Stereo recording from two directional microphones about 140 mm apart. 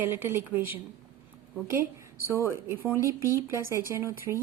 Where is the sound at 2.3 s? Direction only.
20° right (ahead or behind).